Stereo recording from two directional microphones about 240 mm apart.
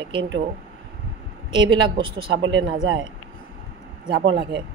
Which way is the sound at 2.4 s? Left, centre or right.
Right.